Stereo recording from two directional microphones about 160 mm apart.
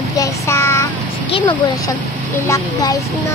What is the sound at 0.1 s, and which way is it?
Child singing, 20° left (ahead or behind).